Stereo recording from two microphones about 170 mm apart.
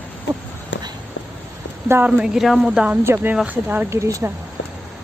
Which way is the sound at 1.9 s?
10° right (ahead or behind).